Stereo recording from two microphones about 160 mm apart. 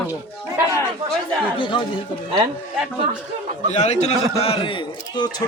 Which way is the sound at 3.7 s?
45° left (ahead or behind).